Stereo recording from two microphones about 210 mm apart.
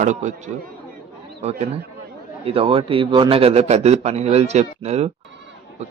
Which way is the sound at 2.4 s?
25° right (ahead or behind).